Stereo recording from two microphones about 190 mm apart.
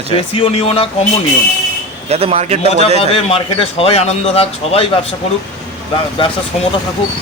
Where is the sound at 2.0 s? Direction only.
30° right (ahead or behind).